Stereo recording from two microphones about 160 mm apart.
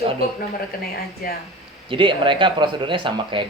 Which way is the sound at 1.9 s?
30° right (ahead or behind).